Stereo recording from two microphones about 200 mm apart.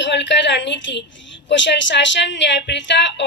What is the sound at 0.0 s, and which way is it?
A woman's voice, 65° left (ahead or behind).